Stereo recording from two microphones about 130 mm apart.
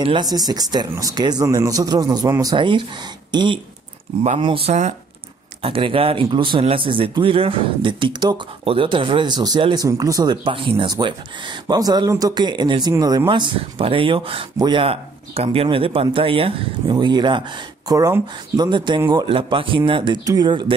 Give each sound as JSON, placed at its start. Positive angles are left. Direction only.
{"t": 0.0, "sound": "speech", "side_deg": -35}